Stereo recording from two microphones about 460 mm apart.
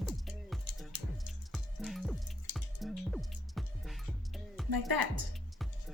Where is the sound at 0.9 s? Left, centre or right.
Right.